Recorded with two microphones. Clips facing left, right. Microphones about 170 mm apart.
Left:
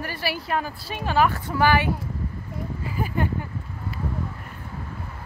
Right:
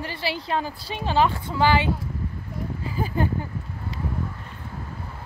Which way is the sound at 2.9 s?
35° right (ahead or behind).